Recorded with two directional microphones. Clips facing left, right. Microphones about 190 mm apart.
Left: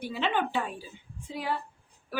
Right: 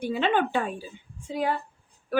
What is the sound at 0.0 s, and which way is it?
Speech, 50° right (ahead or behind).